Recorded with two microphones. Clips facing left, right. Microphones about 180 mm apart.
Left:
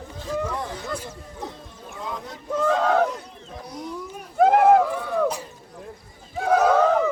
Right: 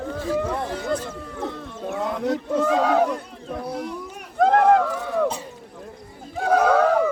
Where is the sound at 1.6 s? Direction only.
70° right (ahead or behind).